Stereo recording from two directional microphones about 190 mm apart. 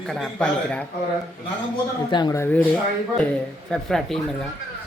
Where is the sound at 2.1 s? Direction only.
20° left (ahead or behind).